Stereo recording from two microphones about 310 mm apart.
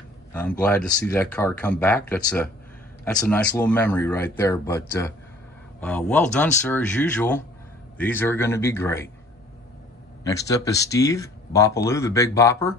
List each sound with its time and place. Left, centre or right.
0.3 s speech: centre
10.2 s speech: centre